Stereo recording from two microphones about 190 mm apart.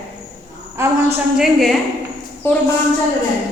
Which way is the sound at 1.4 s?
Centre (ahead or behind).